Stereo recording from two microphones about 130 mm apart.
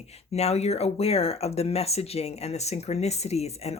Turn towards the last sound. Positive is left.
turn(degrees=55)  # may be behind; listen again after turning